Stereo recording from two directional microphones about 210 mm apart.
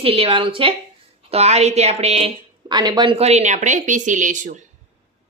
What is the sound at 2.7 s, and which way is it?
A woman's voice, 20° right (ahead or behind).